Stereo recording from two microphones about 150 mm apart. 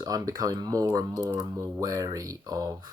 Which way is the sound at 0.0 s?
25° right (ahead or behind).